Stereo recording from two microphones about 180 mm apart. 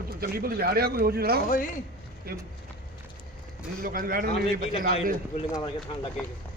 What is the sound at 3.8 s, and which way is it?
Speech, 50° right (ahead or behind).